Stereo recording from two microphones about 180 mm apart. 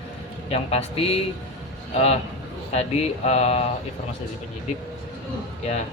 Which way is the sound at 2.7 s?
35° left (ahead or behind).